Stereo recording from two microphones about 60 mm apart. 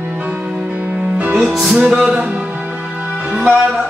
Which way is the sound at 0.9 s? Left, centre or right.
Right.